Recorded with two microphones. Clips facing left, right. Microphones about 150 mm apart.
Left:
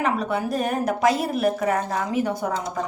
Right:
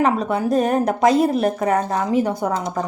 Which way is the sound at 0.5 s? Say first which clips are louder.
Right 6 dB; 35° right (ahead or behind).